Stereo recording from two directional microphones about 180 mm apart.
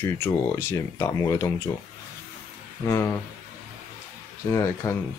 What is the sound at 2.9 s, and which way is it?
Speech, 15° left (ahead or behind).